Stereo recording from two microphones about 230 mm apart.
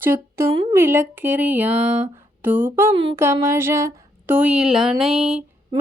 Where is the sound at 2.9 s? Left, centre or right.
Right.